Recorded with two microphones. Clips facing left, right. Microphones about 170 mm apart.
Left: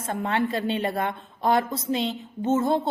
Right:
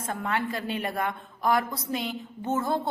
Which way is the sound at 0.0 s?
25° left (ahead or behind).